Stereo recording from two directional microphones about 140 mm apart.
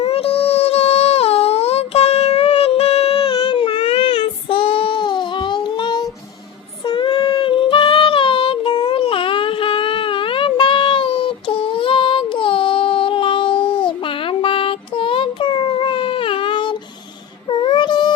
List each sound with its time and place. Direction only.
0.0 s a sound: 45° left (ahead or behind)
3.8 s child singing: 40° left (ahead or behind)
6.8 s female singing: 35° left (ahead or behind)
17.5 s child singing: 35° left (ahead or behind)